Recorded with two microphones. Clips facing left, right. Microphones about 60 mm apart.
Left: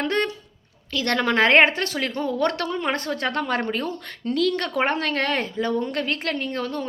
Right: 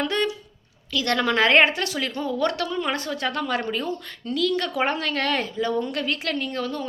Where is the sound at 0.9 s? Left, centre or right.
Left.